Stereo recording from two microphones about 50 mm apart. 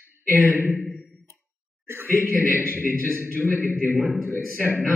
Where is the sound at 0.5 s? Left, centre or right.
Right.